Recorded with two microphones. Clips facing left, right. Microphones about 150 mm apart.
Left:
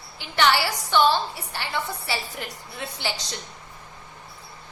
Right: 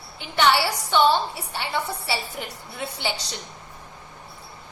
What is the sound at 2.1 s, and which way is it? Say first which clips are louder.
Speech: right 2 dB; 5° right (ahead or behind).